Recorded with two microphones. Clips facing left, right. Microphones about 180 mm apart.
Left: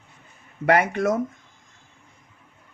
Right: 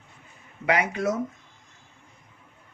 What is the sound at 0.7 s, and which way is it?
Speech, 50° left (ahead or behind).